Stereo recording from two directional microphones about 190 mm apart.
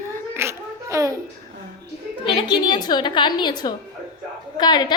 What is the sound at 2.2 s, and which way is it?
A woman's voice, 25° left (ahead or behind).